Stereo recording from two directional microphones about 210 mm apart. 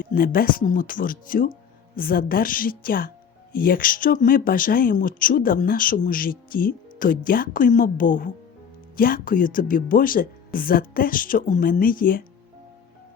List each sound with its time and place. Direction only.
0.0 s a woman's voice: 40° left (ahead or behind)